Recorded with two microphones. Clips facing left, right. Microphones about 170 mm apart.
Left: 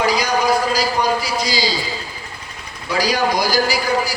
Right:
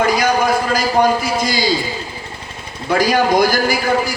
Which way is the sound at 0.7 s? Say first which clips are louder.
Right 4 dB; 50° right (ahead or behind).